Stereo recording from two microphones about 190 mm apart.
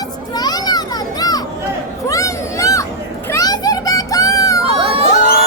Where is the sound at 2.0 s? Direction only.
15° left (ahead or behind).